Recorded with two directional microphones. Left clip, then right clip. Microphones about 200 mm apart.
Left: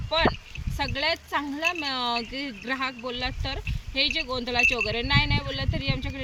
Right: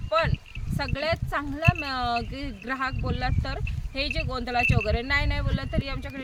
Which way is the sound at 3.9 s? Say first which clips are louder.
Left 4 dB; 35° right (ahead or behind).